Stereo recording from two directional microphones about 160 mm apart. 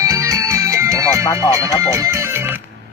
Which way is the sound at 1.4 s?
20° right (ahead or behind).